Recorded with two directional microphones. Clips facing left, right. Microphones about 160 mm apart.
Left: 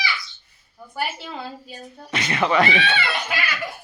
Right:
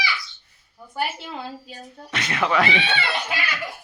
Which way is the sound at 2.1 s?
Centre (ahead or behind).